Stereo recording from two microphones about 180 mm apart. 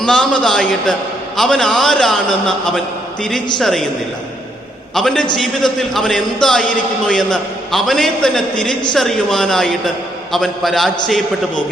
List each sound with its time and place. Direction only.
0.0 s a man's voice: 5° left (ahead or behind)
4.9 s a man's voice: 5° left (ahead or behind)